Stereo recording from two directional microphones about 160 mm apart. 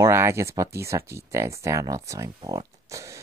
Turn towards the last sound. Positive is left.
turn(degrees=-20)  # may be behind; listen again after turning